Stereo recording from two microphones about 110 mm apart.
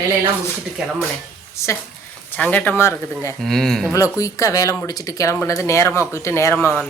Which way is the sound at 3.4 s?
Centre (ahead or behind).